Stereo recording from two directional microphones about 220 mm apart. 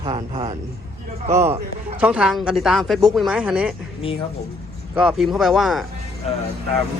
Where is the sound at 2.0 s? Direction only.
5° right (ahead or behind).